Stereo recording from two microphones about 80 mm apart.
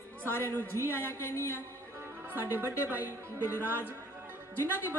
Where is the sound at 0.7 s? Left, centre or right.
Left.